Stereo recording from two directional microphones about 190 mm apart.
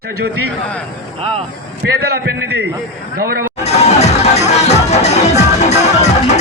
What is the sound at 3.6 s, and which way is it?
Music, 35° left (ahead or behind).